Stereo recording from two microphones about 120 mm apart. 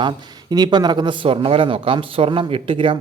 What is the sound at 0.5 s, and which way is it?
Speech, 35° right (ahead or behind).